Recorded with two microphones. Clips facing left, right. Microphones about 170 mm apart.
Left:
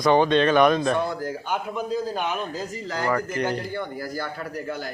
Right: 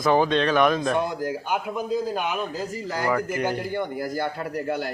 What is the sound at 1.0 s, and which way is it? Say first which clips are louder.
A man's voice: right 1 dB; 15° right (ahead or behind).